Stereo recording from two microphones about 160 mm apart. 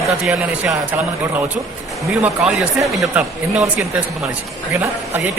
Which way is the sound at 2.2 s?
5° right (ahead or behind).